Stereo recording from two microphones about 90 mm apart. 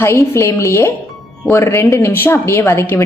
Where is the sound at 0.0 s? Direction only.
30° left (ahead or behind).